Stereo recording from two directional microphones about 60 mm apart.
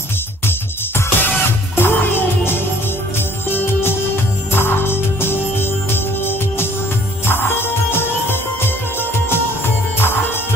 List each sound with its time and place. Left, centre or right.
0.5 s music: left
9.9 s music: left